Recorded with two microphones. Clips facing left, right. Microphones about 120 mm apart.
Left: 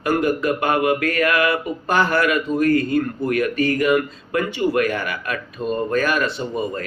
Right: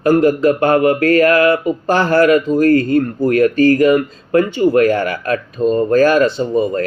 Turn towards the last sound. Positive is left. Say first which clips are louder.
# right 9 dB
turn(degrees=-30)  # may be behind; listen again after turning